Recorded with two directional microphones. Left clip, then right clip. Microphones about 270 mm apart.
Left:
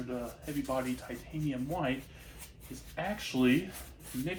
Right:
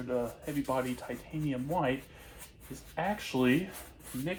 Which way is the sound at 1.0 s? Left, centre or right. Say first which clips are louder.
Right 1 dB; right.